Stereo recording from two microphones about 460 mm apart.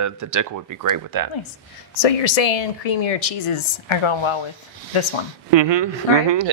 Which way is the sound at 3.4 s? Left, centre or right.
Left.